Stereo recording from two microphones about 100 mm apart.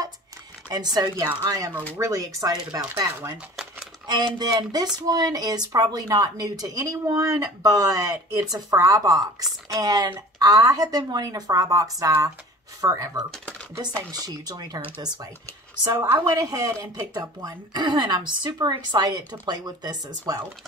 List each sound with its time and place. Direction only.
0.7 s speech: 40° right (ahead or behind)
4.4 s speech: 40° right (ahead or behind)
13.3 s a sound: 10° left (ahead or behind)
14.1 s speech: 40° right (ahead or behind)